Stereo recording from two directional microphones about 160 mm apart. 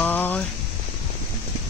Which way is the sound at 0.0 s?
10° left (ahead or behind).